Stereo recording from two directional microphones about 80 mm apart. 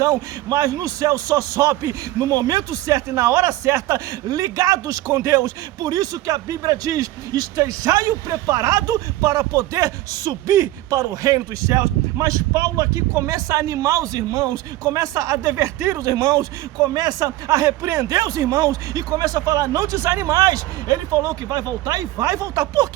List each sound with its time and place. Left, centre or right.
0.0 s speech: right
1.7 s speech: right
5.8 s speech: right
16.0 s speech: right
20.4 s speech: right